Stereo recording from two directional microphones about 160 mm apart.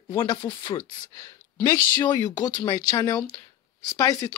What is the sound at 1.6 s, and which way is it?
A woman's voice, 25° left (ahead or behind).